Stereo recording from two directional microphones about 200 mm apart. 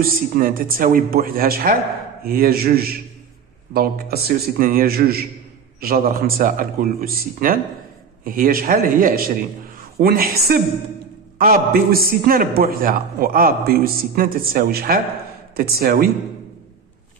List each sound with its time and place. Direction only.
0.0 s a man's voice: 45° right (ahead or behind)